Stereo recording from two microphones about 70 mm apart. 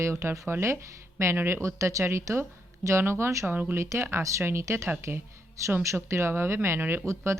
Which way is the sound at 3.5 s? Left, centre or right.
Right.